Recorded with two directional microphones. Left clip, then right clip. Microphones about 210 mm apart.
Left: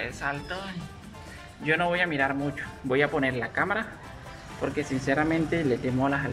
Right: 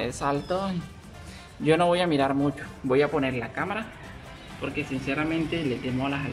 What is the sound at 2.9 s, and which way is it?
Speech, centre (ahead or behind).